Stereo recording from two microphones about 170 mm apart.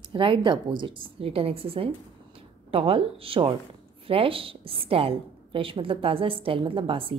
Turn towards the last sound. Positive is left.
turn(degrees=-30)  # may be behind; listen again after turning